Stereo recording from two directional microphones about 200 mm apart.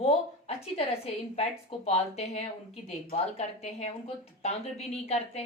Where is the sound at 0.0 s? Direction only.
30° left (ahead or behind).